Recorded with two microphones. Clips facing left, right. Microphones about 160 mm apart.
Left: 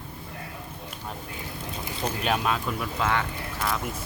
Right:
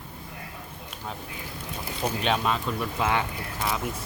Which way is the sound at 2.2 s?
5° left (ahead or behind).